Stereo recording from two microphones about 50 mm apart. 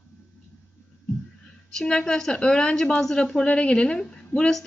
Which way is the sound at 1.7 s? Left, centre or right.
Centre.